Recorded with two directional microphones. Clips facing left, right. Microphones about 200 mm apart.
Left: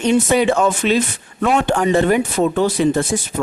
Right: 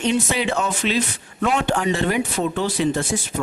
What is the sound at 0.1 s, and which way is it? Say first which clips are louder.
Speech: left 9 dB; 50° left (ahead or behind).